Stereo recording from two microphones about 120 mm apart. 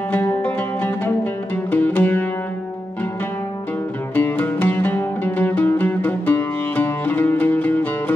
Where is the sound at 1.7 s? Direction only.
15° left (ahead or behind).